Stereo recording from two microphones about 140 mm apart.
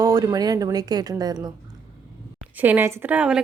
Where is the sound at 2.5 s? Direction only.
15° right (ahead or behind).